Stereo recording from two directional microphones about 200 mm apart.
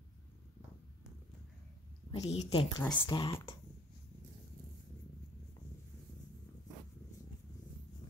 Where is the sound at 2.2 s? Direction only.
30° left (ahead or behind).